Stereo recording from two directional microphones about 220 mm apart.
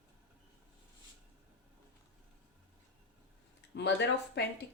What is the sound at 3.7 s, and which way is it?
Speech, 50° left (ahead or behind).